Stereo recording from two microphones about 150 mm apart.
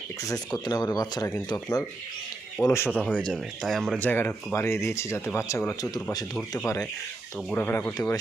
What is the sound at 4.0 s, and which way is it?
Speech, 15° left (ahead or behind).